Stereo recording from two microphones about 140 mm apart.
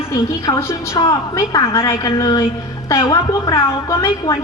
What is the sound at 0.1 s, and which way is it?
A woman's voice, 25° left (ahead or behind).